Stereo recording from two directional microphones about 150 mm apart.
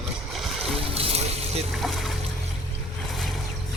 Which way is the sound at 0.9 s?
40° right (ahead or behind).